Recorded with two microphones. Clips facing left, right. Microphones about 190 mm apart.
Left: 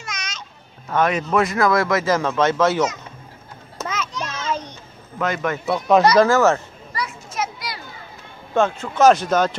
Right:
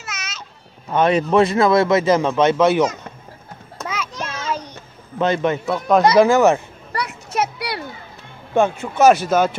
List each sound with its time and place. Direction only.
0.0 s a sound: 5° right (ahead or behind)
0.8 s a man's voice: 20° right (ahead or behind)
3.8 s a sound: 10° right (ahead or behind)
5.2 s speech: 25° right (ahead or behind)
5.7 s speech: centre (ahead or behind)
6.0 s speech: 15° right (ahead or behind)
6.9 s children playing: 65° right (ahead or behind)
8.5 s speech: 15° right (ahead or behind)